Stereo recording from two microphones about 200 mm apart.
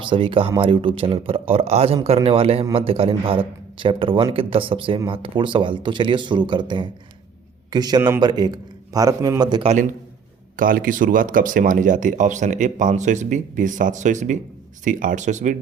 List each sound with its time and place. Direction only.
0.0 s a man's voice: 25° right (ahead or behind)
10.6 s speech: 45° right (ahead or behind)